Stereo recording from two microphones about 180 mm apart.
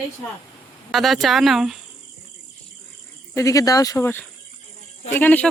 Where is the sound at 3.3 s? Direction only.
15° left (ahead or behind).